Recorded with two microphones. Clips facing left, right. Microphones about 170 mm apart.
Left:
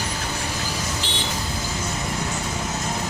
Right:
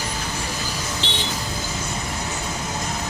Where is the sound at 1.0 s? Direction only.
25° right (ahead or behind).